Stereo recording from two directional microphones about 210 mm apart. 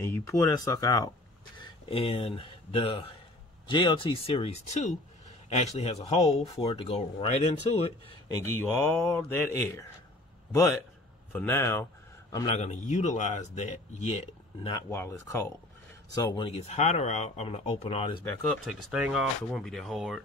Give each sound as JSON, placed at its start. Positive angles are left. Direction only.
{"t": 0.0, "sound": "speech", "side_deg": 10}
{"t": 1.6, "sound": "speech", "side_deg": 25}
{"t": 8.5, "sound": "speech", "side_deg": 10}
{"t": 11.3, "sound": "a man's voice", "side_deg": 10}
{"t": 12.5, "sound": "speech", "side_deg": 35}
{"t": 14.9, "sound": "speech", "side_deg": 10}
{"t": 18.2, "sound": "speech", "side_deg": 5}